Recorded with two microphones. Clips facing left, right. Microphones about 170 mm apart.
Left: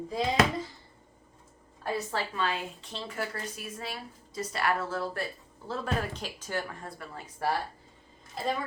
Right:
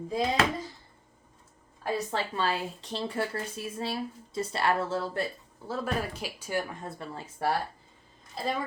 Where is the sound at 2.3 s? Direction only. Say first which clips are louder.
Right 2 dB; 35° right (ahead or behind).